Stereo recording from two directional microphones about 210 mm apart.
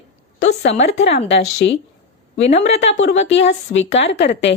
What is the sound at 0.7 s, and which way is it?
Speech, 30° left (ahead or behind).